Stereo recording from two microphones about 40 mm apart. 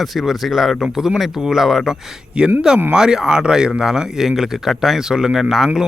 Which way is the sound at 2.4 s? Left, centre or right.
Right.